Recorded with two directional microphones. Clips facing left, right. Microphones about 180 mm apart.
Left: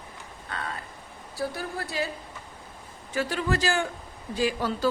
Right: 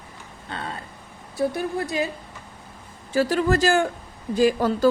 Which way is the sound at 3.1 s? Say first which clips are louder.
Right 7 dB; 40° right (ahead or behind).